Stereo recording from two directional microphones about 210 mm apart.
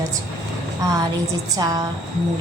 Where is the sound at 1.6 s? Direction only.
15° right (ahead or behind).